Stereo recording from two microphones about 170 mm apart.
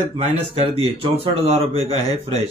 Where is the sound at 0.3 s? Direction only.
35° right (ahead or behind).